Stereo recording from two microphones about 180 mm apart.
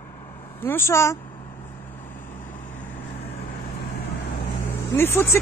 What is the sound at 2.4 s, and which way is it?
Vehicle, 45° left (ahead or behind).